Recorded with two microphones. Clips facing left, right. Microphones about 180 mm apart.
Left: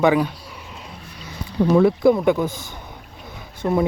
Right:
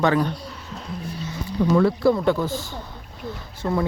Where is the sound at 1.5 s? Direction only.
15° left (ahead or behind).